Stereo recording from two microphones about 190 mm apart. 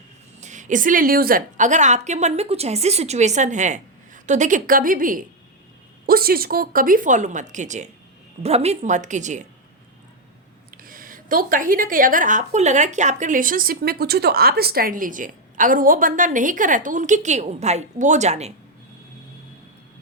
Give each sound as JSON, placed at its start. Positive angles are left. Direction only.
{"t": 0.3, "sound": "a woman's voice", "side_deg": -40}
{"t": 10.8, "sound": "a woman's voice", "side_deg": -50}